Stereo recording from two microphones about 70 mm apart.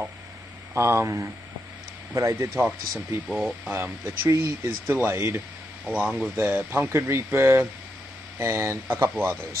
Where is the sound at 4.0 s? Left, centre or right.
Right.